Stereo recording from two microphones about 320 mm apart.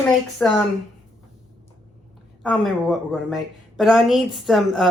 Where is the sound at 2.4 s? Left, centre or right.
Centre.